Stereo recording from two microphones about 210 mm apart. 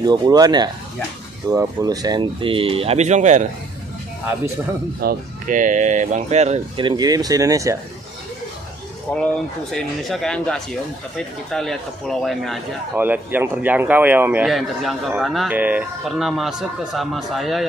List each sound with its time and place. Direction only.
0.0 s speech: 20° right (ahead or behind); by 3.4 s 35° right (ahead or behind)
5.0 s speech: 40° right (ahead or behind); by 7.7 s 15° right (ahead or behind)
9.1 s speech: 5° left (ahead or behind)
12.9 s speech: 10° right (ahead or behind)